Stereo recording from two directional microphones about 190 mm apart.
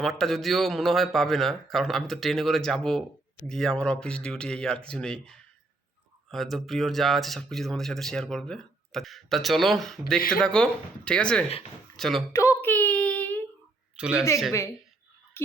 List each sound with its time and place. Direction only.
0.0 s speech: centre (ahead or behind)
10.2 s speech: 50° left (ahead or behind)
10.4 s speech: 5° left (ahead or behind)
12.3 s a sound: 15° left (ahead or behind)
13.9 s speech: 5° right (ahead or behind)